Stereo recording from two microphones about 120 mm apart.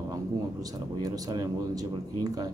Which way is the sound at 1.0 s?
35° right (ahead or behind).